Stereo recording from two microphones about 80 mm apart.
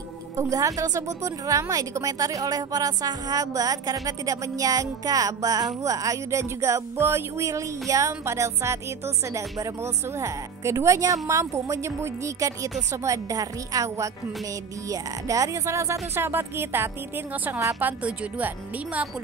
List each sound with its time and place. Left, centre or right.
0.4 s a woman's voice: right; by 19.0 s centre